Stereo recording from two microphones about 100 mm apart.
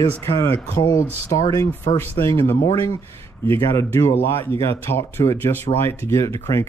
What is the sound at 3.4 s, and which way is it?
Speech, 25° left (ahead or behind).